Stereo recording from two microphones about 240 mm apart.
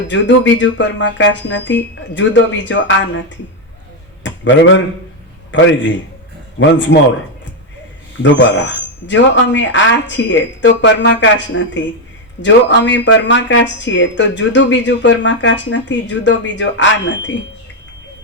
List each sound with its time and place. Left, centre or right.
0.1 s speech: left
4.2 s a sound: left
6.6 s speech: left
8.2 s speech: left